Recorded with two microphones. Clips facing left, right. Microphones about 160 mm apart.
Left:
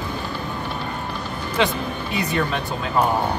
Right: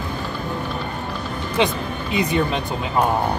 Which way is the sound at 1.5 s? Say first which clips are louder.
Right 1 dB; 20° right (ahead or behind).